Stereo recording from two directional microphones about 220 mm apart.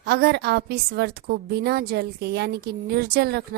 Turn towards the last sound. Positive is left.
turn(degrees=-45)  # may be behind; listen again after turning